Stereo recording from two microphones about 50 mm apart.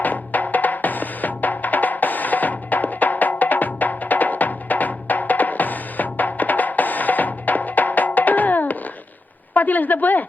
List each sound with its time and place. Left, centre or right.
0.0 s music: left
9.6 s a woman's voice: left